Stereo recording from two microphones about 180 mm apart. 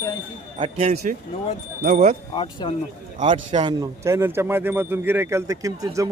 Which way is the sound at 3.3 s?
30° right (ahead or behind).